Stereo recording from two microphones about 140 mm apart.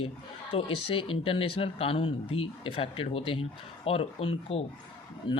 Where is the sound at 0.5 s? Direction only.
40° left (ahead or behind).